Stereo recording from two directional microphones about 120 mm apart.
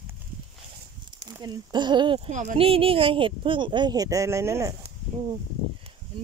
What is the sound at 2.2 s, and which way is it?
Speech, 90° right.